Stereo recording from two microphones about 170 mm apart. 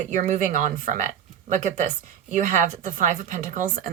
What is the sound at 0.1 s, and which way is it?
Speech, 45° right (ahead or behind).